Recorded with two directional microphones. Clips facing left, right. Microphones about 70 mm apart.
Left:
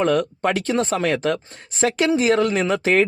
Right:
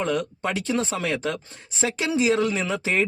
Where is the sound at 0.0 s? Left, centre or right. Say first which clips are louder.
Left 6 dB; left.